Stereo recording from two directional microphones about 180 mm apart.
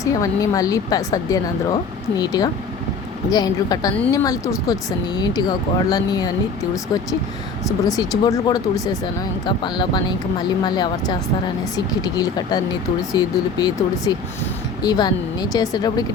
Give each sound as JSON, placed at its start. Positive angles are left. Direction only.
{"t": 0.0, "sound": "speech", "side_deg": 20}
{"t": 7.9, "sound": "speech", "side_deg": 20}